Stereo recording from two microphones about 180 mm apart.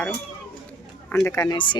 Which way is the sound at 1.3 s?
20° left (ahead or behind).